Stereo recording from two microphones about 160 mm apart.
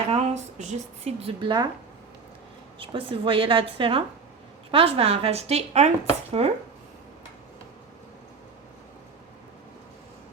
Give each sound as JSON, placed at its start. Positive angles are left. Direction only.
{"t": 0.1, "sound": "speech", "side_deg": -45}
{"t": 2.7, "sound": "speech", "side_deg": -35}